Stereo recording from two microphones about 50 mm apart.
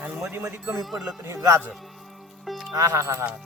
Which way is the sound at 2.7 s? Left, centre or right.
Right.